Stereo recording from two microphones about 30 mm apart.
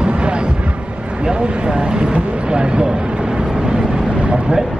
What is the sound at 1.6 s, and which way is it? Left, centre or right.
Speech, right.